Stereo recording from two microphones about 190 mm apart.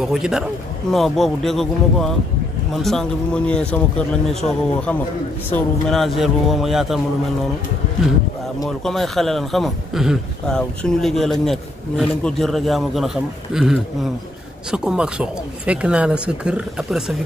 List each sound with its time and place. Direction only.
0.0 s speech: 5° right (ahead or behind)
8.6 s speech: centre (ahead or behind)